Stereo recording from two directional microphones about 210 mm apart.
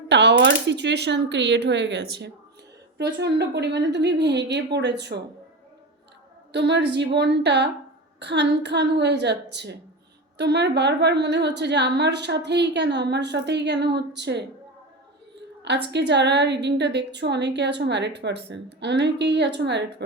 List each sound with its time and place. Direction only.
0.1 s a woman's voice: 55° right (ahead or behind)
6.5 s a woman's voice: 55° right (ahead or behind)
15.9 s a woman's voice: 55° right (ahead or behind)